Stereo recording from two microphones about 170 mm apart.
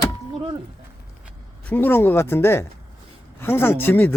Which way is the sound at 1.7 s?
10° left (ahead or behind).